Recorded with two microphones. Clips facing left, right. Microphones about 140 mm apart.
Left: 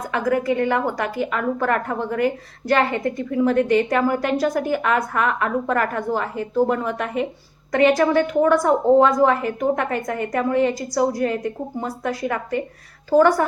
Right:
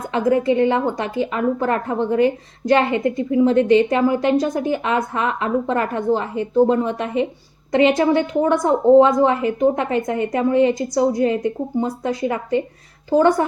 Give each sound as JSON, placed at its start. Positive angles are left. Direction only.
{"t": 0.1, "sound": "a woman's voice", "side_deg": -25}